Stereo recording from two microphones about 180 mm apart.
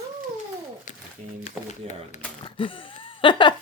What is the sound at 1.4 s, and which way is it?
Speech, 40° left (ahead or behind).